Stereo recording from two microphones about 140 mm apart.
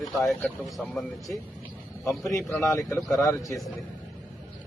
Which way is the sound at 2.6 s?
20° left (ahead or behind).